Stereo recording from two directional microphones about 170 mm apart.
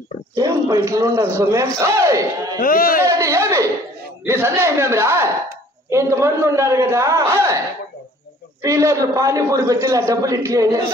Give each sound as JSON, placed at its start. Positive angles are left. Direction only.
{"t": 0.4, "sound": "a sound", "side_deg": -20}
{"t": 0.8, "sound": "a man's voice", "side_deg": -20}
{"t": 2.6, "sound": "speech", "side_deg": 60}
{"t": 3.0, "sound": "a man's voice", "side_deg": -15}
{"t": 8.6, "sound": "a man's voice", "side_deg": -20}